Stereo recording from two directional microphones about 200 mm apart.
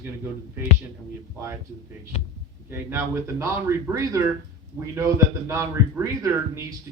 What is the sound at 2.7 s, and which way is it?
Speech, 10° right (ahead or behind).